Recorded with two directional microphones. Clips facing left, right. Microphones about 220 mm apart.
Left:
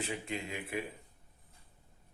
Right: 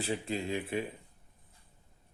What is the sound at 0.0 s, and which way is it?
Speech, 35° right (ahead or behind).